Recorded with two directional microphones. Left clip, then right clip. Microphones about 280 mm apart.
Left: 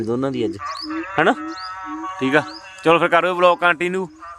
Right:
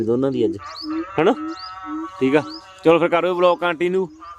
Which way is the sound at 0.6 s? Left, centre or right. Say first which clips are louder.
Left 1 dB; right.